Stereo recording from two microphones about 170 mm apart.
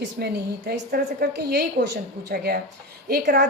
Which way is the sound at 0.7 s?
65° right (ahead or behind).